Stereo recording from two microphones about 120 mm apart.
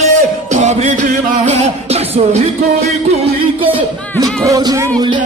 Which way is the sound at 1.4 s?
65° right (ahead or behind).